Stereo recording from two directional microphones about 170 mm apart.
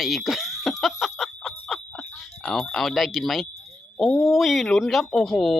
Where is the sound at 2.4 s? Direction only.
Centre (ahead or behind).